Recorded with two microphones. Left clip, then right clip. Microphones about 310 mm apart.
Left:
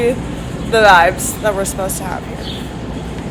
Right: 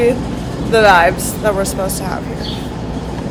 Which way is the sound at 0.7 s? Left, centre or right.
Centre.